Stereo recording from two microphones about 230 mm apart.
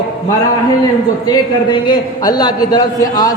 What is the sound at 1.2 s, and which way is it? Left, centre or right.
A man's voice, centre.